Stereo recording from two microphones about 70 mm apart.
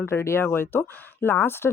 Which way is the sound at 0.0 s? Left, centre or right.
Left.